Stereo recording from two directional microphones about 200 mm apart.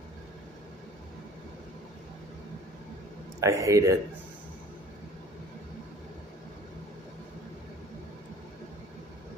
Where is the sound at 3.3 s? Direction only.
15° right (ahead or behind).